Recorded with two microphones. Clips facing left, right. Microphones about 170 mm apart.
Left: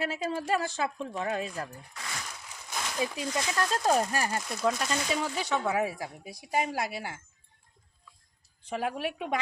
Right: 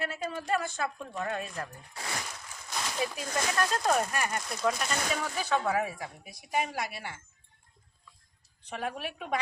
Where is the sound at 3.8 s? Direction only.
30° left (ahead or behind).